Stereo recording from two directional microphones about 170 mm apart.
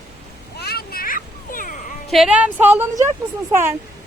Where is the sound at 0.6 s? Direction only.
65° left (ahead or behind).